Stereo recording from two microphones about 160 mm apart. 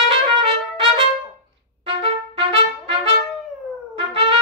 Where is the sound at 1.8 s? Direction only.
35° right (ahead or behind).